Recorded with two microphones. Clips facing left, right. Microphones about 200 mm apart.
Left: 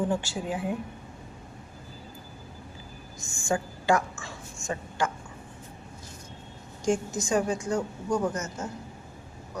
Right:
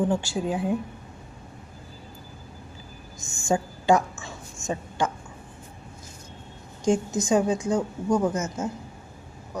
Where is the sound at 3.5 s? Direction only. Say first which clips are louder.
Right 4 dB; 20° right (ahead or behind).